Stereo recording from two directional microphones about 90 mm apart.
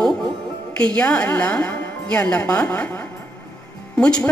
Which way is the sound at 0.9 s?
15° left (ahead or behind).